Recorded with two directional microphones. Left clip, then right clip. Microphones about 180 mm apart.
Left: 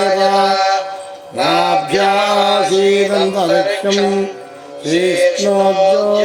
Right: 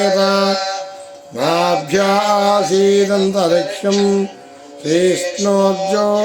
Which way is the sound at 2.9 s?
40° left (ahead or behind).